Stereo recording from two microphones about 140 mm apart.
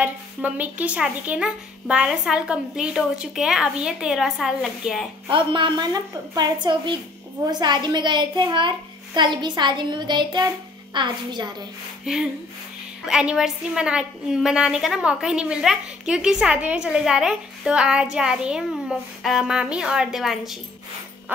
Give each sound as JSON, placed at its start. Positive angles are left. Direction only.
{"t": 0.0, "sound": "a woman's voice", "side_deg": -10}
{"t": 5.3, "sound": "a child's voice", "side_deg": -35}
{"t": 12.0, "sound": "a woman's voice", "side_deg": -5}